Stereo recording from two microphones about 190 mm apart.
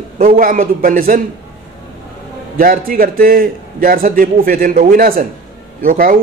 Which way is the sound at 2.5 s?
50° right (ahead or behind).